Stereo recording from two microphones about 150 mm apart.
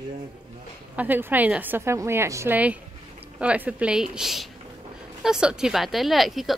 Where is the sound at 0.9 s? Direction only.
10° right (ahead or behind).